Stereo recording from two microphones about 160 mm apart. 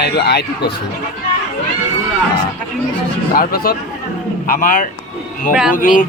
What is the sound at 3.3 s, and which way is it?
Speech, 65° left (ahead or behind).